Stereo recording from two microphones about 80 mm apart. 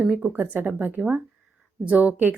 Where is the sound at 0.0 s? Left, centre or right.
Centre.